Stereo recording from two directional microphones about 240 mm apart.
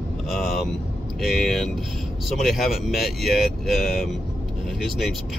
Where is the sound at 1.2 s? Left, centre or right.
Centre.